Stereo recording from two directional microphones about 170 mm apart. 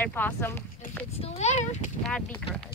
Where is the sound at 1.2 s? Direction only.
40° left (ahead or behind).